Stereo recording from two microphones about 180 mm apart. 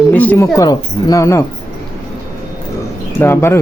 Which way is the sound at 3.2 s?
15° left (ahead or behind).